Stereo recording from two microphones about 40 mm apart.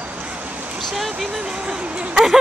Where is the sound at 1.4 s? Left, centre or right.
Right.